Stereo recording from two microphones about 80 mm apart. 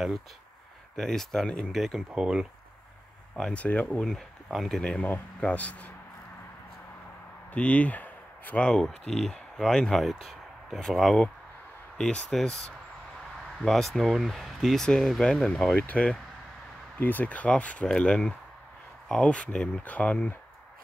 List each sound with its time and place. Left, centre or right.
0.9 s speech: centre
2.1 s speech: centre
3.3 s speech: centre
4.0 s speech: centre
5.0 s speech: centre
7.5 s speech: centre
8.8 s speech: centre